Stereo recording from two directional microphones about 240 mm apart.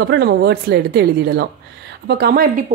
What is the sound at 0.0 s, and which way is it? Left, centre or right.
A woman's voice, right.